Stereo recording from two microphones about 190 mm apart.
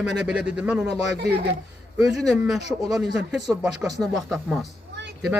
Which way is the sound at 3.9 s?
20° right (ahead or behind).